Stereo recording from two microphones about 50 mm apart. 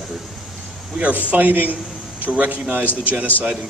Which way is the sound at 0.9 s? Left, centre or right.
Right.